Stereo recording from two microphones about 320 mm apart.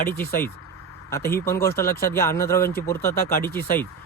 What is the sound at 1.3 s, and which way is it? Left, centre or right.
Speech, centre.